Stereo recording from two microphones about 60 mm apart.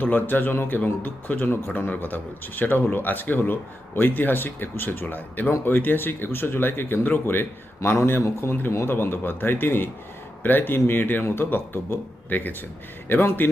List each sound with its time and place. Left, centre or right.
0.0 s speech: left
1.5 s speech: left
1.9 s speech: left
7.8 s speech: left